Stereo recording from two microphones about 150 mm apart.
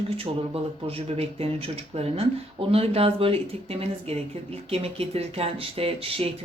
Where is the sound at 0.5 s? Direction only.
40° right (ahead or behind).